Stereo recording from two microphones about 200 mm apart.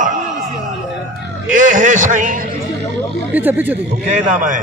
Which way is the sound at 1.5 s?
40° right (ahead or behind).